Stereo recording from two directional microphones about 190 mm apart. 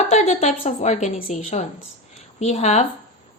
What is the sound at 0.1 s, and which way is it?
A woman's voice, 35° left (ahead or behind).